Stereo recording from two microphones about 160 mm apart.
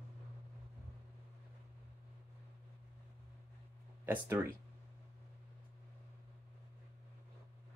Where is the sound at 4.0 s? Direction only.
10° right (ahead or behind).